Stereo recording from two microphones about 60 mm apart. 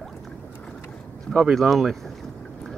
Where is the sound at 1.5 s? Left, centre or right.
Centre.